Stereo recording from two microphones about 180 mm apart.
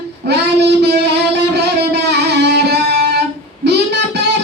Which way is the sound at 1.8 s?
70° right (ahead or behind).